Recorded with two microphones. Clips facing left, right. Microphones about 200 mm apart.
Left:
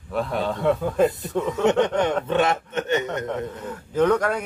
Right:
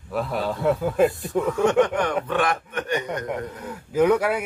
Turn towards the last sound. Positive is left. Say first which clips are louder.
# right 1 dB
turn(degrees=-10)  # may be behind; listen again after turning